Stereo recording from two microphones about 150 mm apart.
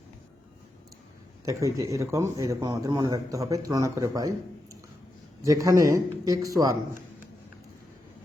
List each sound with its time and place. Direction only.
1.5 s a man's voice: 20° right (ahead or behind)